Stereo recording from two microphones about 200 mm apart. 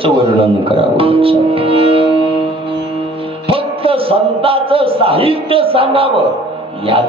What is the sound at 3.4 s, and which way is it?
A man's voice, 30° right (ahead or behind).